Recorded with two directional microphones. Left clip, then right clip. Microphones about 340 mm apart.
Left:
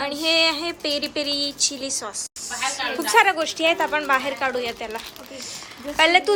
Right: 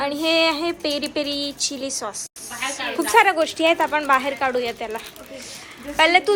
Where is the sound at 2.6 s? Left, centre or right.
Left.